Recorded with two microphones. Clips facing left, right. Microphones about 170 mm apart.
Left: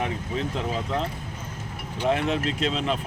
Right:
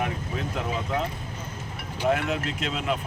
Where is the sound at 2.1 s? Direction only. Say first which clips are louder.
Left 2 dB; 30° left (ahead or behind).